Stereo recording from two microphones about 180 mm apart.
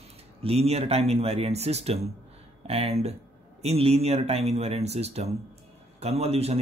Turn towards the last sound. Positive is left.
turn(degrees=-35)  # may be behind; listen again after turning